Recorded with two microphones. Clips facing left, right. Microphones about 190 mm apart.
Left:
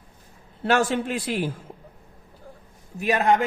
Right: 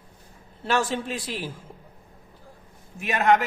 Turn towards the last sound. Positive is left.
turn(degrees=35)  # may be behind; listen again after turning